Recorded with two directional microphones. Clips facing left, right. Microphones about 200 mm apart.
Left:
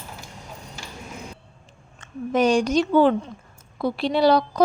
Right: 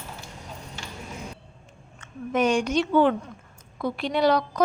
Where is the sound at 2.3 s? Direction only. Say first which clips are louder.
Left 3 dB; 35° left (ahead or behind).